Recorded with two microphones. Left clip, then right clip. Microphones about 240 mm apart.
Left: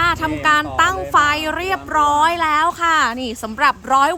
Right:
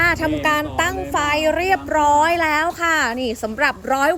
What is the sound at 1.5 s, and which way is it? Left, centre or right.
A woman's voice, centre.